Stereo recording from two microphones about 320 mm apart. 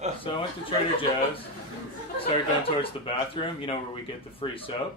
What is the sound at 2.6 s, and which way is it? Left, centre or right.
Speech, centre.